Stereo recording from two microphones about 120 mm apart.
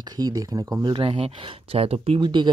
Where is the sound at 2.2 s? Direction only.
40° right (ahead or behind).